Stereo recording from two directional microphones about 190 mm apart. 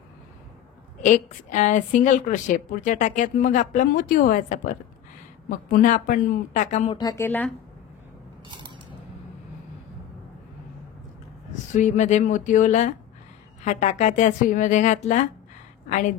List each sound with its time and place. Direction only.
1.0 s a woman's voice: 40° left (ahead or behind)
7.0 s speech: 15° left (ahead or behind)
11.5 s a woman's voice: 40° left (ahead or behind)